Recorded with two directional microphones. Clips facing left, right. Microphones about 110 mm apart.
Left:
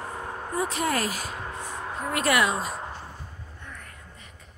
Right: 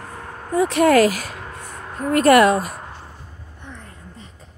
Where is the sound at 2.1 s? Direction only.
50° right (ahead or behind).